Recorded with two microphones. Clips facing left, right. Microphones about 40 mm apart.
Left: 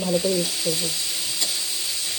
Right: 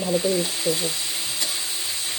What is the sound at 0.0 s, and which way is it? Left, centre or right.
Stir, right.